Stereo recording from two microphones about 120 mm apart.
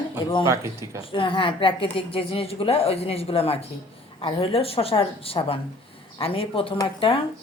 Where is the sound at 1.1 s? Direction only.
45° left (ahead or behind).